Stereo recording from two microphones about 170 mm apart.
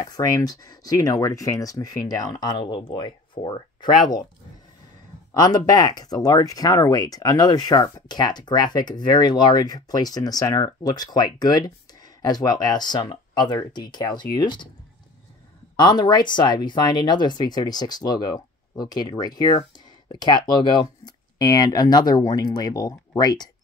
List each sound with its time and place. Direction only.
0.0 s speech: 20° left (ahead or behind)
5.3 s speech: 25° left (ahead or behind)
15.7 s speech: 25° left (ahead or behind)